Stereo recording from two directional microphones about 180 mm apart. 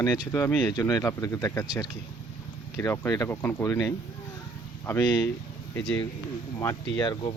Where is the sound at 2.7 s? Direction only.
15° left (ahead or behind).